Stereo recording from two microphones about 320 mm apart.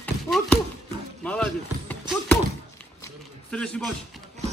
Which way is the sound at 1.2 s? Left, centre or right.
Centre.